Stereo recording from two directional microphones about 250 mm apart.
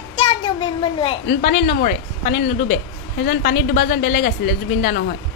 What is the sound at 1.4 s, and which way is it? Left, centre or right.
Speech, left.